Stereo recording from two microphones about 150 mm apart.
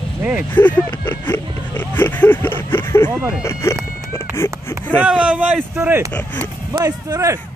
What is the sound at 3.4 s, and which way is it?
Speech, 20° left (ahead or behind).